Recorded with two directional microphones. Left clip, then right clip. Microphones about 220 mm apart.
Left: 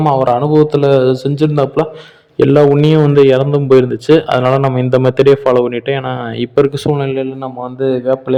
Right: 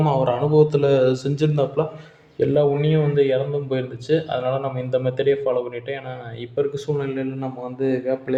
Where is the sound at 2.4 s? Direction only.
50° left (ahead or behind).